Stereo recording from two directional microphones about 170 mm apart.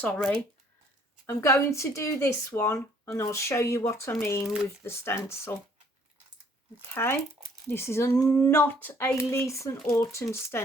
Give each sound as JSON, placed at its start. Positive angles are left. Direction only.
{"t": 0.0, "sound": "speech", "side_deg": 5}
{"t": 6.9, "sound": "speech", "side_deg": 15}